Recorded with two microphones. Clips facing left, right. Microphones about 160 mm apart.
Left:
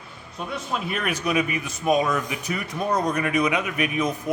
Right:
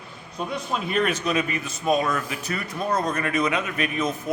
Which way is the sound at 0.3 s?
5° left (ahead or behind).